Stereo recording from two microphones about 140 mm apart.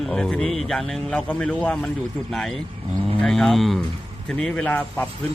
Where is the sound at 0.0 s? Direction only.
5° left (ahead or behind).